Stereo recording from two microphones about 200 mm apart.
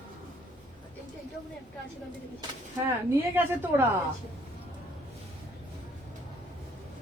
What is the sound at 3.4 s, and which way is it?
Speech, 10° right (ahead or behind).